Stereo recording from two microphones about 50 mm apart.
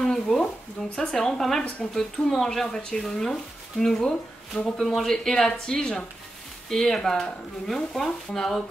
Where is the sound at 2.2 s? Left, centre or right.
Centre.